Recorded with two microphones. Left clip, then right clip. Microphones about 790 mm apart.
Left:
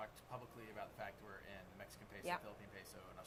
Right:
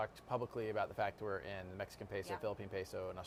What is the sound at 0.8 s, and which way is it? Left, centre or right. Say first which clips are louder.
Speech: right 10 dB; right.